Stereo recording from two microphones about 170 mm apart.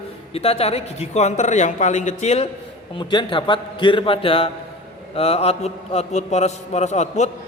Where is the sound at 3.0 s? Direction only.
30° left (ahead or behind).